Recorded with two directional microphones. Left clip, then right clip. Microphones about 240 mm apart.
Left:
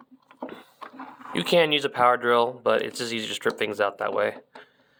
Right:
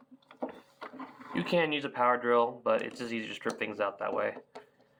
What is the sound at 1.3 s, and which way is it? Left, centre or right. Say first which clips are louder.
Speech: left 8 dB; left.